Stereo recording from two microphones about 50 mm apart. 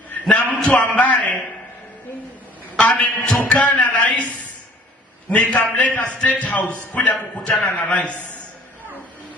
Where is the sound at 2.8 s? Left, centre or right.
Left.